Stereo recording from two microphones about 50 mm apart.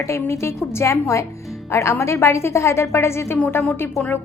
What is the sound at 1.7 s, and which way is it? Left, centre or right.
A woman's voice, left.